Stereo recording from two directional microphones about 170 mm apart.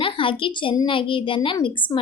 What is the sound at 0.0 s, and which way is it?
A woman's voice, 30° left (ahead or behind).